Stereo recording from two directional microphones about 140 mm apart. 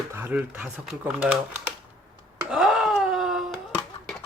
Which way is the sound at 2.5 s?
Centre (ahead or behind).